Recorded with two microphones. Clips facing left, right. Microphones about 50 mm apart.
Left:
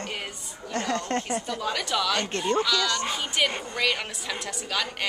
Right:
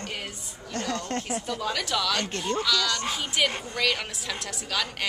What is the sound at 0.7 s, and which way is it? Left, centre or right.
A woman's voice, centre.